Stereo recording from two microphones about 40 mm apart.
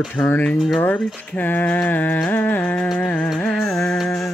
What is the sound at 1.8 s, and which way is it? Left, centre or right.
Speech, left.